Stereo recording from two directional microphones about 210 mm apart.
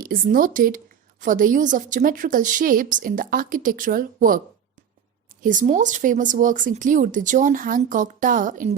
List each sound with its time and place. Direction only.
0.0 s speech: 40° right (ahead or behind)